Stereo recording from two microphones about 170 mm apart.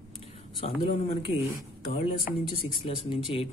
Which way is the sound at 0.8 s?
40° left (ahead or behind).